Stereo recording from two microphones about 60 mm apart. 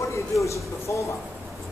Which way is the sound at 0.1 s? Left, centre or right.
Left.